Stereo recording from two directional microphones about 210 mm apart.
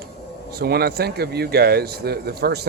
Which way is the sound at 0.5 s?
50° right (ahead or behind).